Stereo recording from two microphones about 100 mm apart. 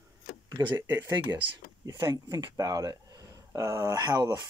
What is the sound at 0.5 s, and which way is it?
Speech, 40° right (ahead or behind).